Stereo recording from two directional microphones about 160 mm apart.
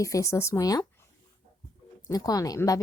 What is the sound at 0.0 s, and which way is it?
A woman's voice, 20° left (ahead or behind).